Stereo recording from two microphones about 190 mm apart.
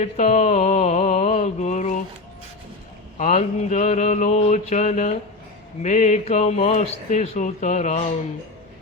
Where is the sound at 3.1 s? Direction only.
40° left (ahead or behind).